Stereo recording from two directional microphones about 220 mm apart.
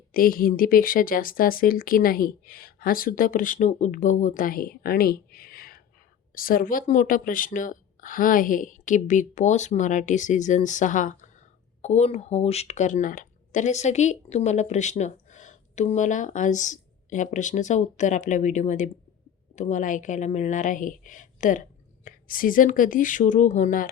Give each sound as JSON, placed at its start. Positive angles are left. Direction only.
{"t": 0.1, "sound": "speech", "side_deg": 40}